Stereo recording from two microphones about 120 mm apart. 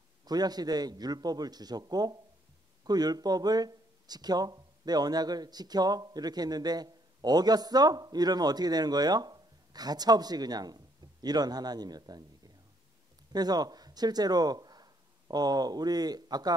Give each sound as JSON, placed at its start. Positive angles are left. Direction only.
{"t": 0.2, "sound": "speech", "side_deg": -35}
{"t": 13.3, "sound": "speech", "side_deg": -35}